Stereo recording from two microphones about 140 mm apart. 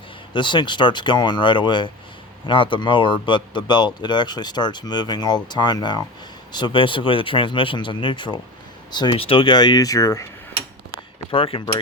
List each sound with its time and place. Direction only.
0.3 s speech: 35° left (ahead or behind)
11.3 s speech: 40° left (ahead or behind)